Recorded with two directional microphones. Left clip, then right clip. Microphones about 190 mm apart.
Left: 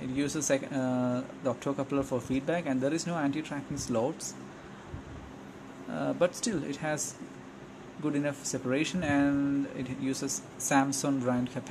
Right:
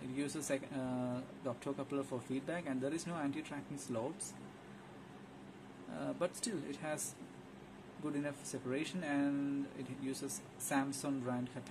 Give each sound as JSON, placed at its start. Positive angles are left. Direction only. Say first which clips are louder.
{"t": 0.1, "sound": "speech", "louder": "left 10 dB", "side_deg": 10}
{"t": 5.9, "sound": "speech", "louder": "left 11 dB", "side_deg": 10}
{"t": 8.0, "sound": "speech", "louder": "left 10 dB", "side_deg": 15}